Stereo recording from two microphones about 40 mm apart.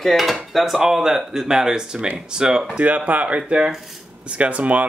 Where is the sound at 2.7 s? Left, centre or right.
Right.